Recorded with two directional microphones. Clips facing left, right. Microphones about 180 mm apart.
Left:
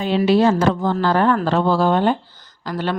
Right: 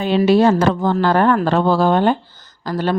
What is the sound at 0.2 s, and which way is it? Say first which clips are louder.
Speech: right 2 dB; 50° right (ahead or behind).